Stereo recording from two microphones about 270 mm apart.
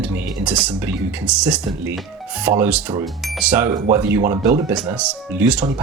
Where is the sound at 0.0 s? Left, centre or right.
Centre.